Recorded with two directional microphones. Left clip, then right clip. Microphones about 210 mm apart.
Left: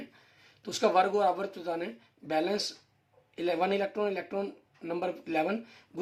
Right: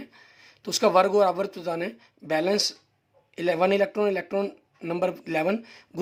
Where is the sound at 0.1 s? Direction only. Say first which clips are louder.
Right 7 dB; 40° right (ahead or behind).